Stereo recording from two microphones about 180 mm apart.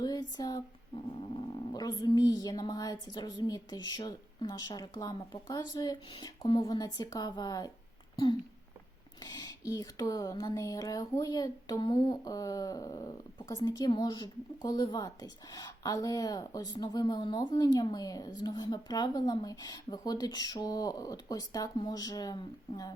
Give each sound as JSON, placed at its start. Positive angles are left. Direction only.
{"t": 0.0, "sound": "a sound", "side_deg": 20}
{"t": 1.7, "sound": "speech", "side_deg": 20}
{"t": 9.2, "sound": "speech", "side_deg": 20}